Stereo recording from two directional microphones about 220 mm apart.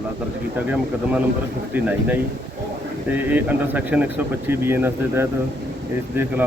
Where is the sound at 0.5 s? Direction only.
5° right (ahead or behind).